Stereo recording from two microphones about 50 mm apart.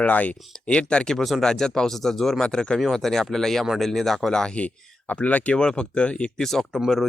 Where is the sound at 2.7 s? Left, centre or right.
Centre.